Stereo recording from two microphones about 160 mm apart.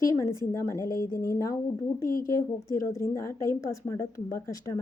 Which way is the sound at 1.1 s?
15° left (ahead or behind).